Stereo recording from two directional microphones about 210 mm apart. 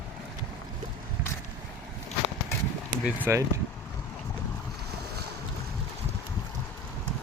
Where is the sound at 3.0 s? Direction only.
10° right (ahead or behind).